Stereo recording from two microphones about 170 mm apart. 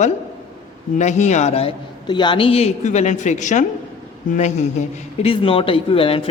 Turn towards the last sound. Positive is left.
turn(degrees=35)  # may be behind; listen again after turning